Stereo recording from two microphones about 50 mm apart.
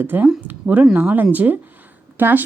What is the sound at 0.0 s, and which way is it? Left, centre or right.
Speech, right.